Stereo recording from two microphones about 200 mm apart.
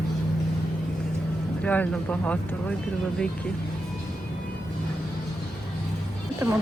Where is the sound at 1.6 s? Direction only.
5° left (ahead or behind).